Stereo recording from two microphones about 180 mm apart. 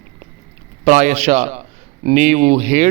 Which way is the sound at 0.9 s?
40° right (ahead or behind).